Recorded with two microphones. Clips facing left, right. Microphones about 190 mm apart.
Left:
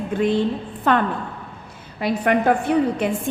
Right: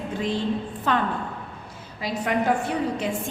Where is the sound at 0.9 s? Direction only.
60° left (ahead or behind).